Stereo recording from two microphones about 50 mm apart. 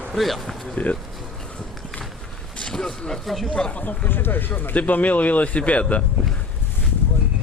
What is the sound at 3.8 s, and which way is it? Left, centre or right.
Speech, left.